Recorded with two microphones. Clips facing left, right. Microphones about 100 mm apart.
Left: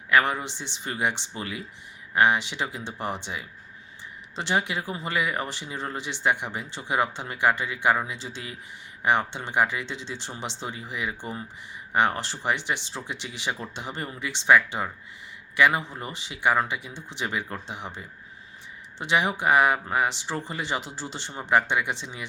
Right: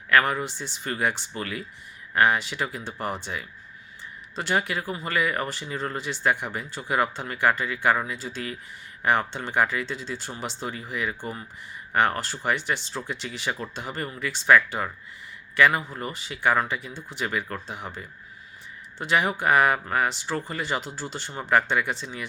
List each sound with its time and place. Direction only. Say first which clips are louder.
0.1 s speech: right 1 dB; 20° left (ahead or behind)